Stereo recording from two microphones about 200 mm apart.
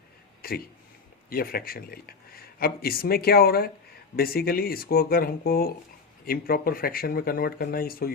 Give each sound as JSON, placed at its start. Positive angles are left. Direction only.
{"t": 0.4, "sound": "speech", "side_deg": 50}